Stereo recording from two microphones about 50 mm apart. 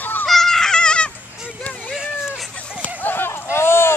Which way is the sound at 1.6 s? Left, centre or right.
Left.